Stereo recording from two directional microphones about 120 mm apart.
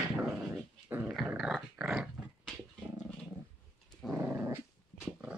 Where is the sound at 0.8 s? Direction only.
20° right (ahead or behind).